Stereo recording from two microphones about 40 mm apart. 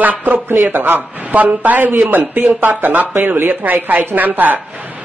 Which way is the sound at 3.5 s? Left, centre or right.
Right.